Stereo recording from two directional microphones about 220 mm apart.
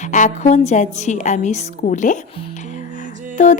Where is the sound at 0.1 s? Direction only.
35° left (ahead or behind).